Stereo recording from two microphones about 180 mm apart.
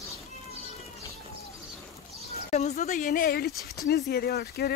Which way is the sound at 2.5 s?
40° left (ahead or behind).